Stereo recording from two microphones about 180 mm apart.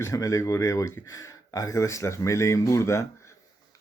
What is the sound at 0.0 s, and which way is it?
Speech, 15° left (ahead or behind).